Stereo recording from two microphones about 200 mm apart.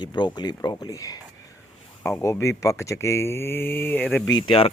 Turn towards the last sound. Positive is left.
turn(degrees=25)  # may be behind; listen again after turning